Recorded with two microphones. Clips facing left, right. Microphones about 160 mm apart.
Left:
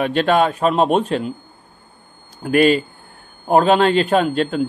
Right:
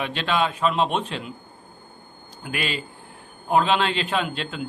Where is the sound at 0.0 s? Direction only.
50° left (ahead or behind).